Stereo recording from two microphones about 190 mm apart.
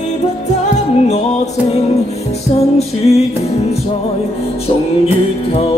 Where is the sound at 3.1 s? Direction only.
35° left (ahead or behind).